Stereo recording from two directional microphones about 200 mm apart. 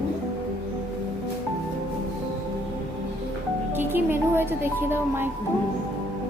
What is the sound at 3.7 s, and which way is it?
Music, 10° right (ahead or behind).